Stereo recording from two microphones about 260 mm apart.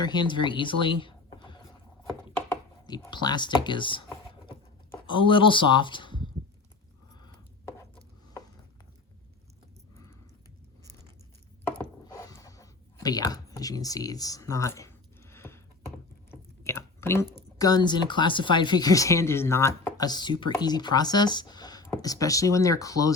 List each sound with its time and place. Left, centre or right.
0.0 s speech: centre
5.1 s speech: centre
11.8 s a sound: centre
16.3 s chewing: centre
17.3 s speech: centre